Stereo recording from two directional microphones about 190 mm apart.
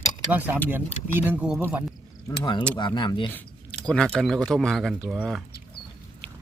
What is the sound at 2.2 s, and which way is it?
Speech, 25° left (ahead or behind).